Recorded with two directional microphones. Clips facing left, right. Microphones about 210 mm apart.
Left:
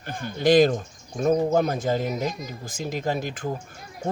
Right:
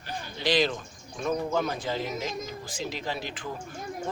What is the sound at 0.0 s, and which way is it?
Speech, 50° left (ahead or behind).